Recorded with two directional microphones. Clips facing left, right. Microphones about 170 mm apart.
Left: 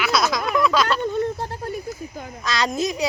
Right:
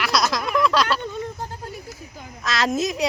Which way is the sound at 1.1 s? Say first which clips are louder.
Left 6 dB; 60° left (ahead or behind).